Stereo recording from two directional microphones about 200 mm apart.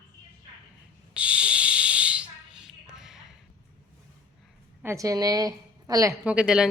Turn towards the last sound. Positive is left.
turn(degrees=-5)  # may be behind; listen again after turning